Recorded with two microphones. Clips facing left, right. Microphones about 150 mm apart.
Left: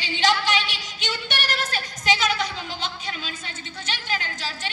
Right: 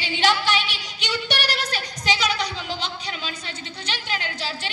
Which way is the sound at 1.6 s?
50° left (ahead or behind).